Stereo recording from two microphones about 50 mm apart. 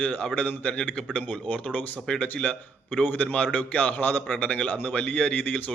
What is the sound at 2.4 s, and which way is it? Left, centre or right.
A man's voice, left.